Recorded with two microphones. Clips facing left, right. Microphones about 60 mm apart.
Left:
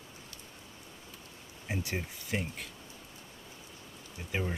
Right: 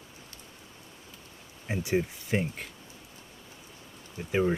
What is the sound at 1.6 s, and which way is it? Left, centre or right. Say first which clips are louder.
Speech: right 8 dB; right.